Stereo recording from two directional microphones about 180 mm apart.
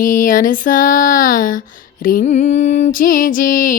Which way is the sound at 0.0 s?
50° left (ahead or behind).